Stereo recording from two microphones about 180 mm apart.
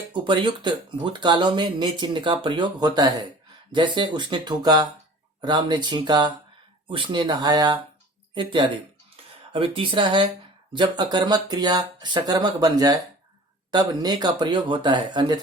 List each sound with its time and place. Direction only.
0.1 s speech: 25° right (ahead or behind)